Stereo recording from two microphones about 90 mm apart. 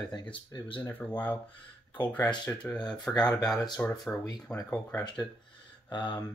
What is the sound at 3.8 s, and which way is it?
Speech, 20° left (ahead or behind).